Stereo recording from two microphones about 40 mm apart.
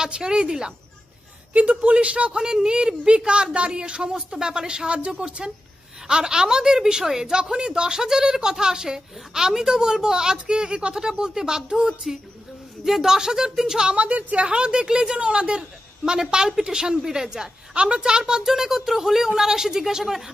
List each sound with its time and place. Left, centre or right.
0.0 s a woman's voice: centre
1.5 s a man's voice: right; by 13.9 s centre
13.9 s a woman's voice: right; by 20.2 s centre